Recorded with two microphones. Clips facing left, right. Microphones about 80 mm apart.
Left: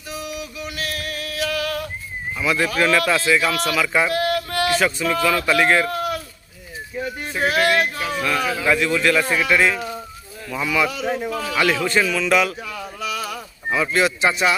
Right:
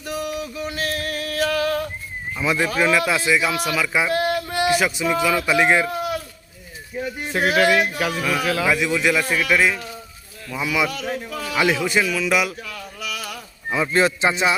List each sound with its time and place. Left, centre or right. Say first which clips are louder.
0.1 s a sound: right 4 dB; right
2.4 s speech: even; right; by 4.1 s centre
4.1 s speech: even; right
5.8 s a sound: left 1 dB; centre
8.2 s speech: left 1 dB; centre
9.3 s speech: left 1 dB; centre
10.9 s speech: left 4 dB; centre
11.5 s speech: even; centre
12.5 s a sound: left 3 dB; centre
13.9 s speech: right 2 dB; right